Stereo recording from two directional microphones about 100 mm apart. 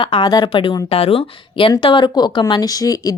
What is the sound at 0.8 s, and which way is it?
Speech, 90° left.